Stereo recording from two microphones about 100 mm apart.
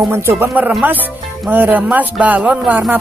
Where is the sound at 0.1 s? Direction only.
25° right (ahead or behind).